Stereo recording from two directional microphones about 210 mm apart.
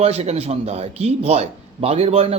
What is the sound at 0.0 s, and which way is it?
A man's voice, 30° right (ahead or behind).